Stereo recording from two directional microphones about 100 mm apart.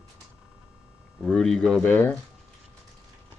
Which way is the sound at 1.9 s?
15° left (ahead or behind).